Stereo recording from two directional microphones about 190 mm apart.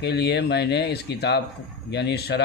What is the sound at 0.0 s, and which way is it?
Speech, 60° left (ahead or behind).